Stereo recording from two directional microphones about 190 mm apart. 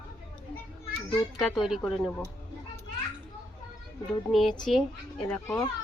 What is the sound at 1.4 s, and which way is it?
Speech, centre (ahead or behind).